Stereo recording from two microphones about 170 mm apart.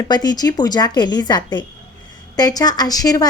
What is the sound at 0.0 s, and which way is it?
A woman's voice, 25° left (ahead or behind).